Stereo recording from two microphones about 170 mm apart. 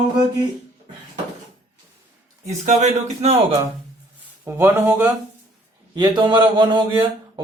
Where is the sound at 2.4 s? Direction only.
40° right (ahead or behind).